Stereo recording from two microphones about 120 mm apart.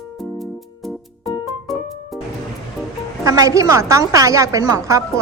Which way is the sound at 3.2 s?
30° right (ahead or behind).